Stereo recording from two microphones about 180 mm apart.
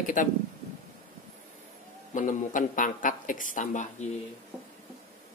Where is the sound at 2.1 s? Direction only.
45° left (ahead or behind).